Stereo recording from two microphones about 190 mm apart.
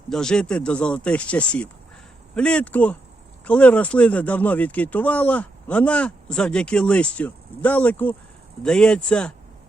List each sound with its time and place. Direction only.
0.1 s speech: 5° left (ahead or behind)